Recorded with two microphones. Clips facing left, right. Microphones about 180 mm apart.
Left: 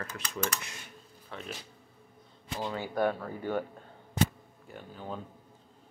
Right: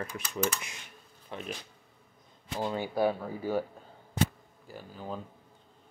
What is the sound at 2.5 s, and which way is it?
Speech, 15° right (ahead or behind).